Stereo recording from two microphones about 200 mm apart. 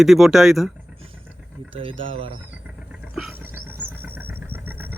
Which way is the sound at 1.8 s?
25° right (ahead or behind).